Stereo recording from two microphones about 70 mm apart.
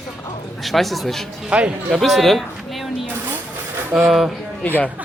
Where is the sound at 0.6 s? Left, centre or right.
Centre.